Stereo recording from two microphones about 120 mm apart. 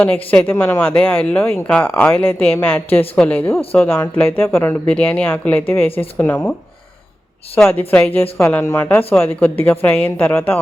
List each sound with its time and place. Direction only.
0.0 s speech: 15° left (ahead or behind)
7.7 s speech: 15° left (ahead or behind)